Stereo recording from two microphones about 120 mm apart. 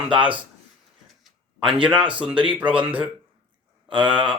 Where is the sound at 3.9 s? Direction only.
45° right (ahead or behind).